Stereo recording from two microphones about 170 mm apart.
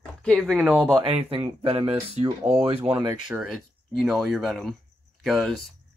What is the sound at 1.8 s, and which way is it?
Speech, 35° right (ahead or behind).